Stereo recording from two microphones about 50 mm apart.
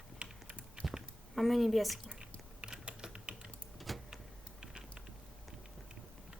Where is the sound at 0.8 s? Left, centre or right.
Centre.